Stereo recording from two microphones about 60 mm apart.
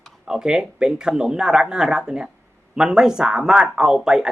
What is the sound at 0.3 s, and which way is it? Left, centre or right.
Speech, centre.